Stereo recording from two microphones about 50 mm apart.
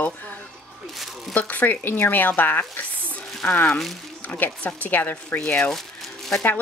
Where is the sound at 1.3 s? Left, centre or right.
Left.